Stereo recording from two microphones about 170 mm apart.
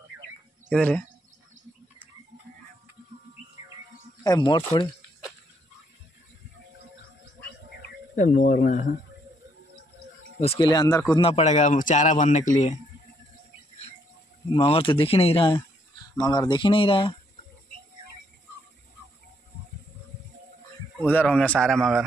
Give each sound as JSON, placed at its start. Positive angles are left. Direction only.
{"t": 0.7, "sound": "speech", "side_deg": 5}
{"t": 4.2, "sound": "speech", "side_deg": 25}
{"t": 8.2, "sound": "a man's voice", "side_deg": 55}
{"t": 10.4, "sound": "speech", "side_deg": 30}
{"t": 11.1, "sound": "a man's voice", "side_deg": 35}
{"t": 14.5, "sound": "speech", "side_deg": 30}
{"t": 21.1, "sound": "a man's voice", "side_deg": 10}